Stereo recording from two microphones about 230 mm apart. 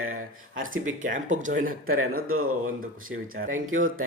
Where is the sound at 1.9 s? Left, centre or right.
Right.